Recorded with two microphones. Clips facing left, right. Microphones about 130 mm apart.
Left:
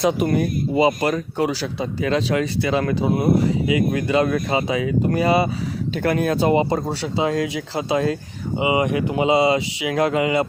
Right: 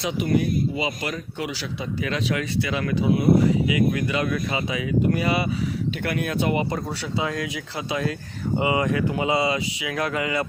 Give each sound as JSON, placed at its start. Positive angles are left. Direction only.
{"t": 0.0, "sound": "speech", "side_deg": 45}
{"t": 8.5, "sound": "speech", "side_deg": 15}